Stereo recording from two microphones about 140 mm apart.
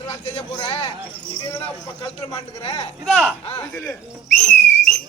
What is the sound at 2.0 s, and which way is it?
Speech, 25° left (ahead or behind).